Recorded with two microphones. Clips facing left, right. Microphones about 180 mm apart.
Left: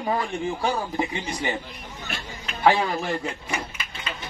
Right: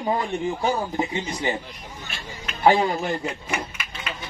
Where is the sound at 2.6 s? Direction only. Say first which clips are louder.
Right 2 dB; 20° right (ahead or behind).